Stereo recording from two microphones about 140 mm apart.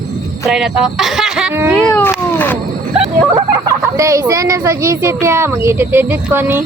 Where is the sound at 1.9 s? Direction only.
15° left (ahead or behind).